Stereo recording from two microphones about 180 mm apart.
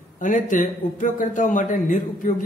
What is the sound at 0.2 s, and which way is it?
A man's voice, 45° left (ahead or behind).